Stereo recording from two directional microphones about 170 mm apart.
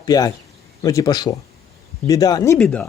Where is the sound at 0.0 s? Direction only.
20° left (ahead or behind).